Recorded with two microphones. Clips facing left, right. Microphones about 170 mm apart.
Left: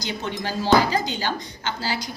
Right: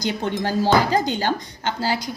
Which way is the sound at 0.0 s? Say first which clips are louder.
Right 5 dB; 50° right (ahead or behind).